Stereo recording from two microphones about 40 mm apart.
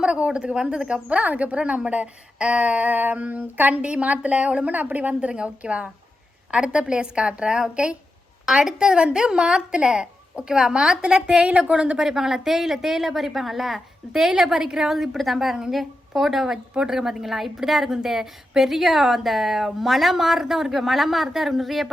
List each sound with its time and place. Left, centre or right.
0.0 s speech: right
1.0 s speech: right
3.8 s speech: right
4.7 s a woman's voice: right
5.3 s speech: right
11.9 s a woman's voice: centre